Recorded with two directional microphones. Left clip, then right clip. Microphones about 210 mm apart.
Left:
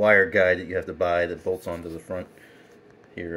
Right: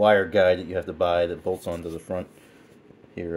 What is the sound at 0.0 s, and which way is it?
Speech, 90° right.